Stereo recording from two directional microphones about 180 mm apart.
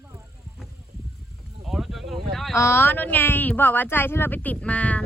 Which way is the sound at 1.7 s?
Centre (ahead or behind).